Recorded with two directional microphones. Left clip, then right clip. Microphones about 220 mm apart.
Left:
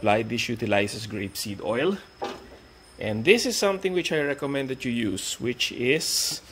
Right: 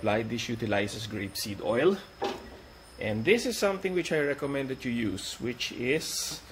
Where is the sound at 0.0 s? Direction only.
40° left (ahead or behind).